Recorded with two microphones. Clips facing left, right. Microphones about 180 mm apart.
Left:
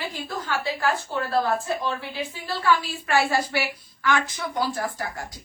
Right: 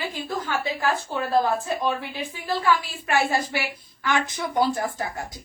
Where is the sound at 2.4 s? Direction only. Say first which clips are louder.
Right 1 dB; 15° right (ahead or behind).